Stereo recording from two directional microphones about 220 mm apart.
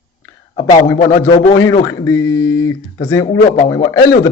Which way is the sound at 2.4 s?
65° left (ahead or behind).